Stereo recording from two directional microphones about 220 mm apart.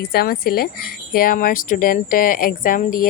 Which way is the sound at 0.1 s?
45° left (ahead or behind).